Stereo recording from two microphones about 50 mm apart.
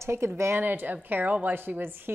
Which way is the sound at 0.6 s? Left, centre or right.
Right.